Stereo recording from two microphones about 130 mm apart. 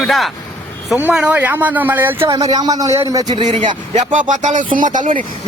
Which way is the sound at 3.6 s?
65° right (ahead or behind).